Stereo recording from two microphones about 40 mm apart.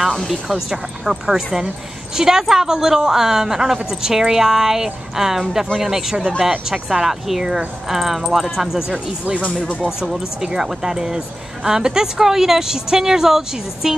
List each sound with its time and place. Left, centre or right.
0.3 s speech: centre
8.9 s speech: right
9.8 s speech: centre